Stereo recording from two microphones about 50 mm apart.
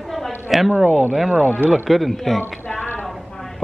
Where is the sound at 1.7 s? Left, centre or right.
Centre.